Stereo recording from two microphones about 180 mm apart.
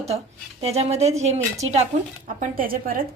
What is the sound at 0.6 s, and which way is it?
A woman's voice, 35° right (ahead or behind).